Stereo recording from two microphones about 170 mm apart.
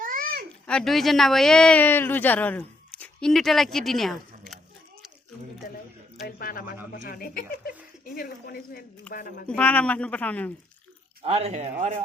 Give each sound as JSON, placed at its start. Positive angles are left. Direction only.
{"t": 0.0, "sound": "a sound", "side_deg": -55}
{"t": 0.7, "sound": "speech", "side_deg": 5}
{"t": 5.6, "sound": "a sound", "side_deg": 55}
{"t": 6.2, "sound": "speech", "side_deg": 60}
{"t": 9.5, "sound": "a man's voice", "side_deg": 10}
{"t": 11.2, "sound": "a man's voice", "side_deg": -35}